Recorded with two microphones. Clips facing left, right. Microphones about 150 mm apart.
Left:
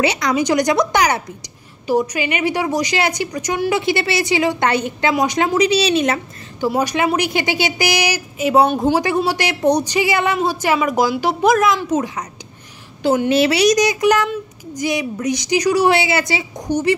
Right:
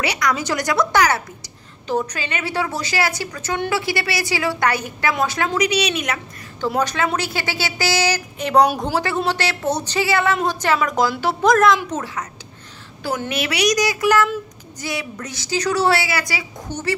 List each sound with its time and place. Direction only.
0.0 s a woman's voice: 25° left (ahead or behind)
3.7 s a woman's voice: 20° left (ahead or behind)
5.6 s a woman's voice: 30° left (ahead or behind)
6.6 s a woman's voice: 10° left (ahead or behind)
8.4 s a woman's voice: 5° left (ahead or behind)
9.0 s a woman's voice: 10° left (ahead or behind)
11.5 s a woman's voice: centre (ahead or behind)
13.0 s a woman's voice: 25° left (ahead or behind)